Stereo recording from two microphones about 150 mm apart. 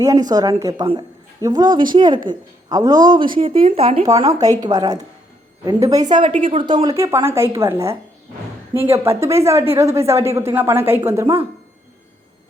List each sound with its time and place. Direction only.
0.0 s a woman's voice: 25° right (ahead or behind)
4.3 s a woman's voice: 25° right (ahead or behind)
6.3 s speech: 55° right (ahead or behind)
6.6 s speech: 35° right (ahead or behind)
6.9 s a woman's voice: 20° right (ahead or behind)